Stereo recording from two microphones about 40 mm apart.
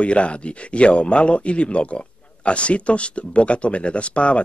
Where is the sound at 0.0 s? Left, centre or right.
Left.